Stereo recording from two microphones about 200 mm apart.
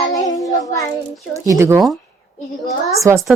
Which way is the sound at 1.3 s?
15° right (ahead or behind).